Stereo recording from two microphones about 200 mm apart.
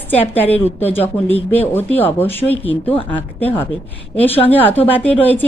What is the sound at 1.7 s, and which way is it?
Speech, 10° left (ahead or behind).